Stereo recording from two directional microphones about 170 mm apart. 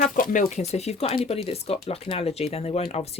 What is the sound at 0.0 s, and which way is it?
Speech, 50° left (ahead or behind).